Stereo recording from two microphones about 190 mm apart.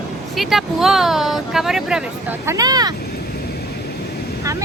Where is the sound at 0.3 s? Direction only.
Centre (ahead or behind).